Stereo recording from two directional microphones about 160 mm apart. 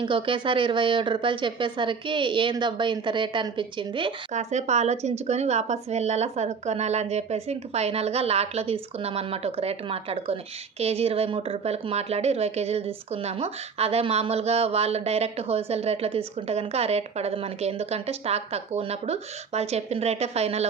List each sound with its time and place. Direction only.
0.0 s a woman's voice: 30° right (ahead or behind)
4.3 s a woman's voice: 45° right (ahead or behind)